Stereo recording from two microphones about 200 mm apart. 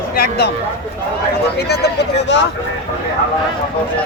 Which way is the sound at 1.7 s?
55° left (ahead or behind).